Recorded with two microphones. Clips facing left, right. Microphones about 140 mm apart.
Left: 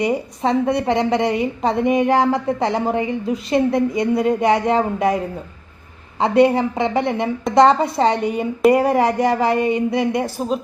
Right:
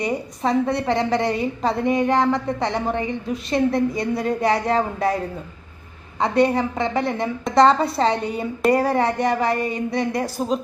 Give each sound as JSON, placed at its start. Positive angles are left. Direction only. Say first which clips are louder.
{"t": 0.0, "sound": "a woman's voice", "louder": "left 4 dB", "side_deg": 25}
{"t": 6.1, "sound": "a woman's voice", "louder": "left 4 dB", "side_deg": 25}
{"t": 9.1, "sound": "a woman's voice", "louder": "left 3 dB", "side_deg": 30}
{"t": 10.0, "sound": "a woman's voice", "louder": "left 3 dB", "side_deg": 5}